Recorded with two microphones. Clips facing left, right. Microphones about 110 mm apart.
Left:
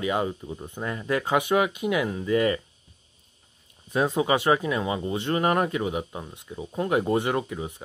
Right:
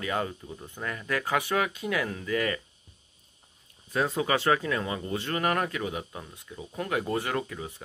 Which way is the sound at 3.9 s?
20° left (ahead or behind).